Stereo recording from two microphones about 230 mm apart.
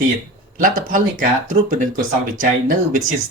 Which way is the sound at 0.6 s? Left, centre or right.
Right.